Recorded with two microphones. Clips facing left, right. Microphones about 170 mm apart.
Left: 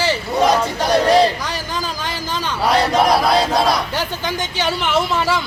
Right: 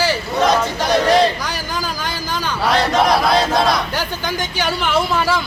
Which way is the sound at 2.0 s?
25° left (ahead or behind).